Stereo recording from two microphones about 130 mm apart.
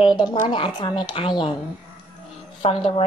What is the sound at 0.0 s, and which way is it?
A woman's voice, 35° left (ahead or behind).